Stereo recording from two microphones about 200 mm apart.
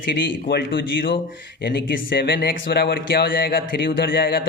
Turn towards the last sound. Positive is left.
turn(degrees=50)  # may be behind; listen again after turning